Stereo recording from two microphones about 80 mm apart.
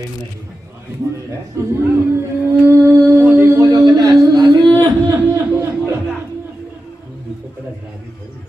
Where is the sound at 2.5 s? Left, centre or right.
Right.